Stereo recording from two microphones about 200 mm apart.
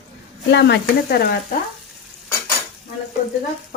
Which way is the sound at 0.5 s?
55° left (ahead or behind).